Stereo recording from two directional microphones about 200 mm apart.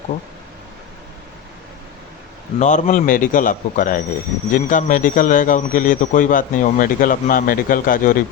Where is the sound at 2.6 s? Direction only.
35° left (ahead or behind).